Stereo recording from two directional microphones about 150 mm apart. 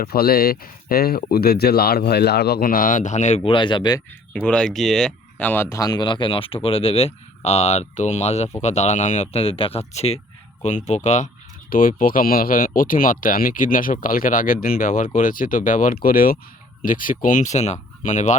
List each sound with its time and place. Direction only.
0.0 s speech: 90° left; by 3.5 s 50° left (ahead or behind)
3.5 s speech: 35° left (ahead or behind)
4.4 s speech: 5° left (ahead or behind); by 11.3 s 50° left (ahead or behind)
11.7 s speech: 65° left (ahead or behind)
16.8 s speech: 65° left (ahead or behind)